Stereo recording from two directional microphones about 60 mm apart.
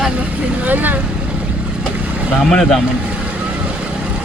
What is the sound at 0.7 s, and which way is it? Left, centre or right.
Speech, right.